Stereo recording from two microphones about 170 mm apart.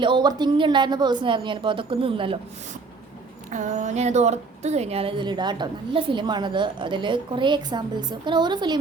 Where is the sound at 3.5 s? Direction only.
45° right (ahead or behind).